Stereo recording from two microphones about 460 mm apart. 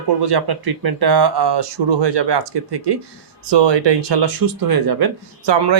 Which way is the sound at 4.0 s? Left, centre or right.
Right.